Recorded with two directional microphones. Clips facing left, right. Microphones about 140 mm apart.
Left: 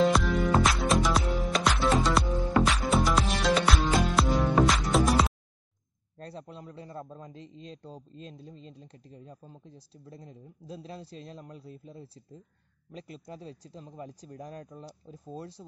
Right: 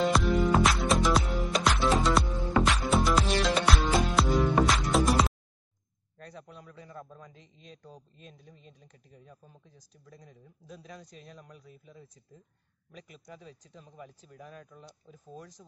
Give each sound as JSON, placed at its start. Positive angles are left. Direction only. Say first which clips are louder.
{"t": 0.0, "sound": "music", "louder": "left 1 dB", "side_deg": 0}
{"t": 6.1, "sound": "a man's voice", "louder": "left 4 dB", "side_deg": 30}